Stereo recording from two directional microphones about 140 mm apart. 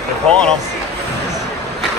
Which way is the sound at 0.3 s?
5° left (ahead or behind).